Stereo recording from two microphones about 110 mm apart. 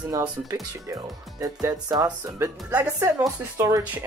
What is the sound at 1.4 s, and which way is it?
Music, 30° right (ahead or behind).